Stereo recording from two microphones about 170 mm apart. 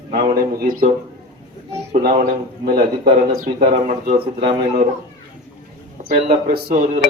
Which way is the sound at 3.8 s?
45° right (ahead or behind).